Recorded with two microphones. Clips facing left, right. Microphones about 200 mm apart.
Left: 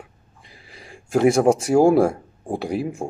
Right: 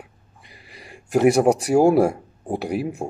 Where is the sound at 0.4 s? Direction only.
5° right (ahead or behind).